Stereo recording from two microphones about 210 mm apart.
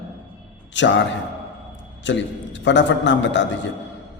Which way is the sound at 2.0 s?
60° left (ahead or behind).